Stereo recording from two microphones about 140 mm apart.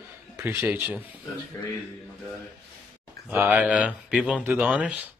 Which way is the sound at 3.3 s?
10° right (ahead or behind).